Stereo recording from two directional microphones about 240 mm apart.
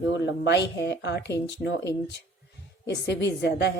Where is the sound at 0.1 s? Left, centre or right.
Left.